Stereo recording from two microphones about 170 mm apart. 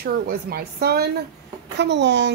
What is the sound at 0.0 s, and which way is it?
Speech, 65° right (ahead or behind).